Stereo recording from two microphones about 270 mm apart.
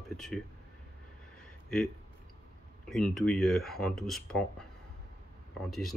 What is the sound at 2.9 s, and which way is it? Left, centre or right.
Speech, centre.